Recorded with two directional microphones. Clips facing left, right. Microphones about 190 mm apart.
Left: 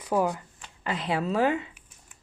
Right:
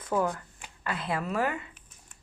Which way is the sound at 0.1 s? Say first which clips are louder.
Left 3 dB; 15° left (ahead or behind).